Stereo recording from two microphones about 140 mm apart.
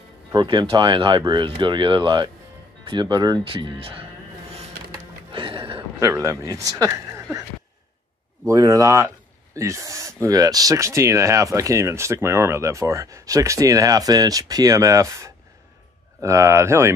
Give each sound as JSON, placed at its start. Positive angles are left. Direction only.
{"t": 0.3, "sound": "speech", "side_deg": -35}
{"t": 5.3, "sound": "a sound", "side_deg": -40}
{"t": 5.9, "sound": "speech", "side_deg": -20}
{"t": 8.5, "sound": "speech", "side_deg": -25}